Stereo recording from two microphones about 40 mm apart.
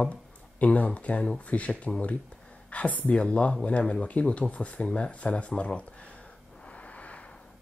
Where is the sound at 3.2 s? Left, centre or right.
Left.